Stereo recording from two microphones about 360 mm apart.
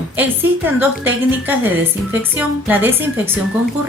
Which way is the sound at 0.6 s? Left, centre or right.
Centre.